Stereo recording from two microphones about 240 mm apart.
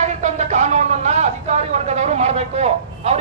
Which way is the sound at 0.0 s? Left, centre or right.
Right.